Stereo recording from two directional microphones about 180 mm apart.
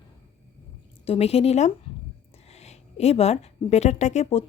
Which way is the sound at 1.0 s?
35° left (ahead or behind).